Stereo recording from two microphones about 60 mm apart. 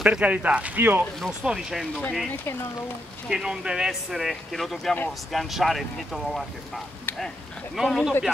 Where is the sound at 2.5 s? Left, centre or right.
Left.